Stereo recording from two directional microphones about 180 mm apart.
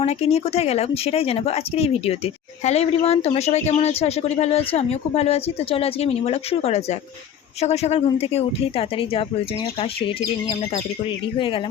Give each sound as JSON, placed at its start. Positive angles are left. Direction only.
{"t": 0.0, "sound": "speech", "side_deg": 35}